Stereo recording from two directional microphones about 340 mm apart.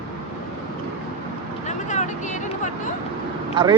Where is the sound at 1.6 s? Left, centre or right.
Left.